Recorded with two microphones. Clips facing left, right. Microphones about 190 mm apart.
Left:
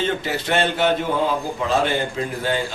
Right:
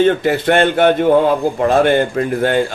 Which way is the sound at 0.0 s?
55° right (ahead or behind).